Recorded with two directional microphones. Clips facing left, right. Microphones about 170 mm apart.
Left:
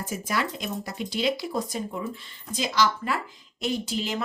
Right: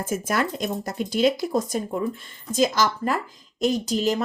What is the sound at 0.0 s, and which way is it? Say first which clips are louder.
Speech: right 4 dB; 50° right (ahead or behind).